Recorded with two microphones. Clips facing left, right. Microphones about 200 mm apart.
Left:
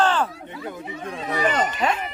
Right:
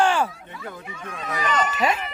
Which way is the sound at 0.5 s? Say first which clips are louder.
Left 4 dB; 30° left (ahead or behind).